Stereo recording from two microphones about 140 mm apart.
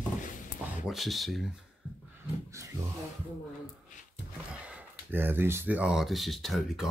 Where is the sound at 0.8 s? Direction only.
Centre (ahead or behind).